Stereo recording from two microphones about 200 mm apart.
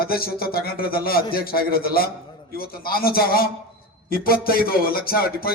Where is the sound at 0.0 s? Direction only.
50° left (ahead or behind).